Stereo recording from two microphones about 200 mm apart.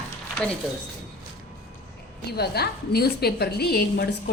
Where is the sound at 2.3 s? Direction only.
55° left (ahead or behind).